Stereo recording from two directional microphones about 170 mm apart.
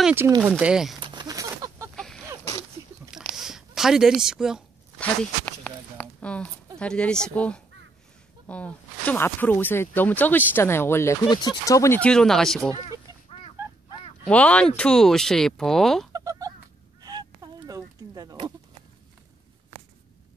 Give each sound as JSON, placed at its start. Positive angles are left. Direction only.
{"t": 0.0, "sound": "speech", "side_deg": -10}
{"t": 1.0, "sound": "a sound", "side_deg": -25}
{"t": 2.0, "sound": "a sound", "side_deg": 0}
{"t": 3.3, "sound": "zipper", "side_deg": 0}
{"t": 5.4, "sound": "a sound", "side_deg": 10}
{"t": 6.8, "sound": "speech", "side_deg": 5}
{"t": 11.2, "sound": "speech", "side_deg": 25}
{"t": 12.0, "sound": "speech", "side_deg": 5}
{"t": 14.2, "sound": "speech", "side_deg": 5}
{"t": 16.1, "sound": "chicken", "side_deg": -20}
{"t": 17.0, "sound": "fowl", "side_deg": -25}
{"t": 17.6, "sound": "a sound", "side_deg": -20}